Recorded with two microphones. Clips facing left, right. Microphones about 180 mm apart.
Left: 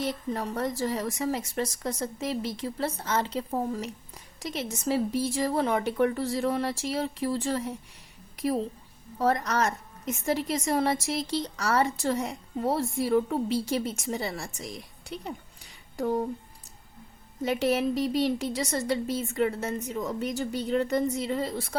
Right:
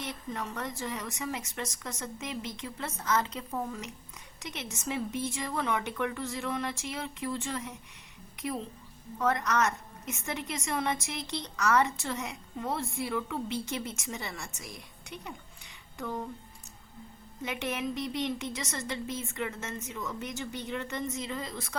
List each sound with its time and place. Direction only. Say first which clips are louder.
0.0 s a woman's voice: left 7 dB; 35° left (ahead or behind)
17.4 s a woman's voice: left 8 dB; 35° left (ahead or behind)